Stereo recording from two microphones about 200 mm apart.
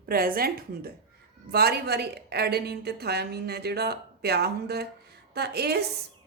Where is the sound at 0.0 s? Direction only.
50° right (ahead or behind).